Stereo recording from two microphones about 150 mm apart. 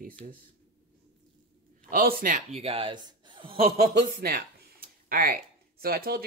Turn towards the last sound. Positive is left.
turn(degrees=-90)